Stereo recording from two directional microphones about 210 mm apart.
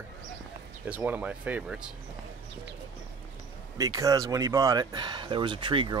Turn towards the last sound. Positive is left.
turn(degrees=-25)  # may be behind; listen again after turning